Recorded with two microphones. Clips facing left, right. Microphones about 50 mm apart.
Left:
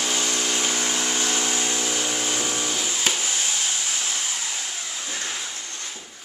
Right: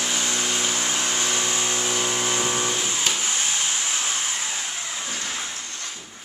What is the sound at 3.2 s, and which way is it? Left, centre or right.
Vehicle, right.